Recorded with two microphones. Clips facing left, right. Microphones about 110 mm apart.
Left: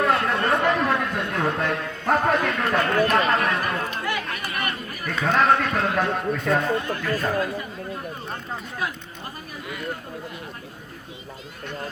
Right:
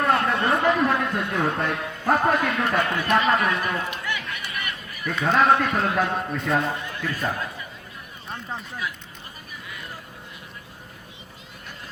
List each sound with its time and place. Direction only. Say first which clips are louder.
0.0 s chatter: even; centre (ahead or behind)
3.2 s a man's voice: even; centre (ahead or behind)
3.7 s speech: left 1 dB; 40° left (ahead or behind)
4.2 s chatter: left 3 dB; 40° left (ahead or behind)
5.0 s a man's voice: right 1 dB; centre (ahead or behind)
6.8 s speech: left 3 dB; 45° left (ahead or behind)